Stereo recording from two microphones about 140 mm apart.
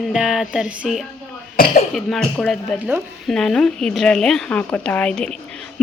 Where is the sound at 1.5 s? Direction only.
90° left.